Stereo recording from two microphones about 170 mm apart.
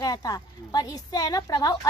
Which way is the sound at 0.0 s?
20° left (ahead or behind).